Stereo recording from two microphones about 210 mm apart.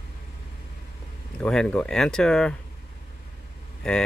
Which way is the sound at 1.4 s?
5° left (ahead or behind).